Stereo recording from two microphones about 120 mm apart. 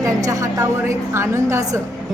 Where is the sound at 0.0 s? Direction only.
30° right (ahead or behind).